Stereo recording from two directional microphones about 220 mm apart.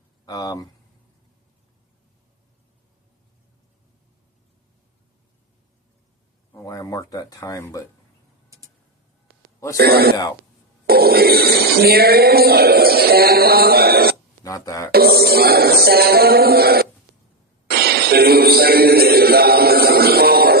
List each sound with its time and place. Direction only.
0.3 s speech: 15° left (ahead or behind)
6.5 s speech: 15° left (ahead or behind)
9.7 s a sound: 45° right (ahead or behind)
10.8 s speech: 45° right (ahead or behind)
14.4 s speech: 15° left (ahead or behind)
14.9 s a sound: 45° right (ahead or behind)
17.7 s a man's voice: 45° right (ahead or behind)